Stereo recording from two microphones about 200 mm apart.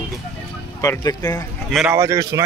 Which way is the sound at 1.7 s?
Centre (ahead or behind).